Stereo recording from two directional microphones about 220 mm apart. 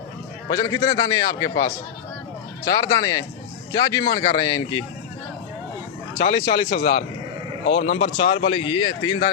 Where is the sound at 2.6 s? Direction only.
15° left (ahead or behind).